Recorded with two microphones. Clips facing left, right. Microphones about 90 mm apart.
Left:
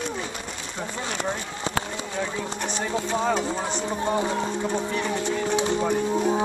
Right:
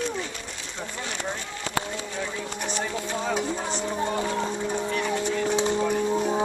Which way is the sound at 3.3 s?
5° right (ahead or behind).